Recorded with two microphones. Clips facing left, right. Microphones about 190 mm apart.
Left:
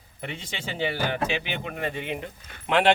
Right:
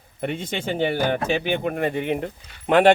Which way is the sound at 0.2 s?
55° right (ahead or behind).